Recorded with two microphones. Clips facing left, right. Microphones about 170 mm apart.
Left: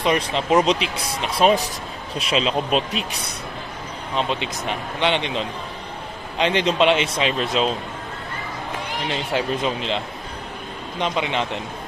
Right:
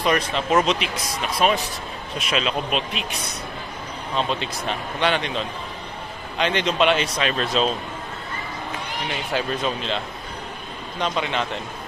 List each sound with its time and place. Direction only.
0.0 s speech: 25° left (ahead or behind)
4.2 s speech: 15° left (ahead or behind)
9.1 s speech: 25° left (ahead or behind)
11.0 s speech: 20° left (ahead or behind)